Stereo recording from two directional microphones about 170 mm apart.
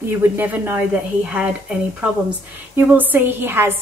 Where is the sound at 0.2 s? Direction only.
10° right (ahead or behind).